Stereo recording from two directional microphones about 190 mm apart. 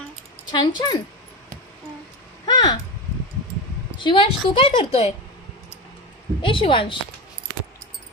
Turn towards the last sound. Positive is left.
turn(degrees=25)  # may be behind; listen again after turning